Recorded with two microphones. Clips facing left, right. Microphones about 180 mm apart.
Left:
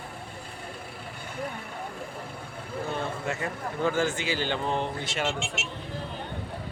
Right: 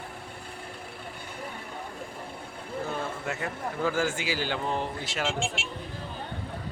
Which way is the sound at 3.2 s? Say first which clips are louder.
Left 1 dB; 5° right (ahead or behind).